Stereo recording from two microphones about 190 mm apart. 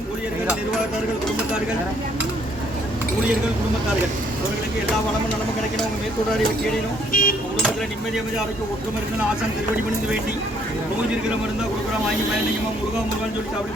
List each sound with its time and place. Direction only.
7.1 s speech: 45° left (ahead or behind)